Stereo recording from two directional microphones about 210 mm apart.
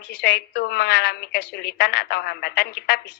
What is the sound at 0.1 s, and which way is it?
A woman's voice, 50° left (ahead or behind).